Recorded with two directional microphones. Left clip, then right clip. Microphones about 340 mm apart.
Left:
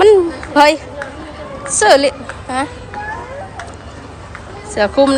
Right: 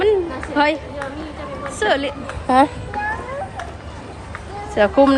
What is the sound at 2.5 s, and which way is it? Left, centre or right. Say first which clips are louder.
Speech: right 6 dB; centre.